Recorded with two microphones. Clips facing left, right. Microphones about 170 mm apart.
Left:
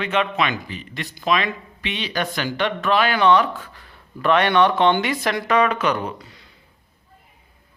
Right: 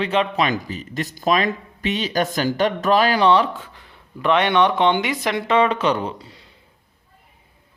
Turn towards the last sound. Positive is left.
turn(degrees=-30)  # may be behind; listen again after turning